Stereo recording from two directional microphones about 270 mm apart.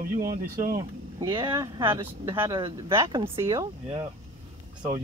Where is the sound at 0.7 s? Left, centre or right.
Centre.